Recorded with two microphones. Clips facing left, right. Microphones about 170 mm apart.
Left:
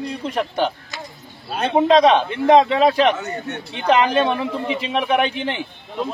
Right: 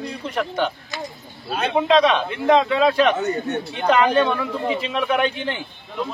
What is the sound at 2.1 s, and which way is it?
A man's voice, 25° left (ahead or behind).